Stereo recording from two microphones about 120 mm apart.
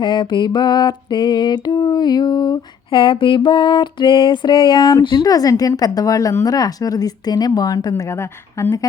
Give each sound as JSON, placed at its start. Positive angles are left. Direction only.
{"t": 0.0, "sound": "music", "side_deg": 40}